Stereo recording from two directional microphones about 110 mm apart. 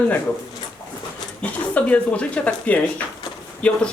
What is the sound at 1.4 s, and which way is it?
Speech, 10° left (ahead or behind).